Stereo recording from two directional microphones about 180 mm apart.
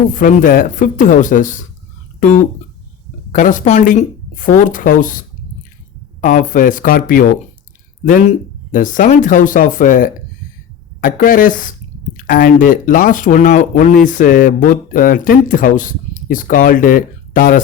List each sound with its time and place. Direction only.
0.1 s speech: 50° left (ahead or behind)
3.3 s speech: 45° left (ahead or behind)
6.2 s speech: 45° left (ahead or behind)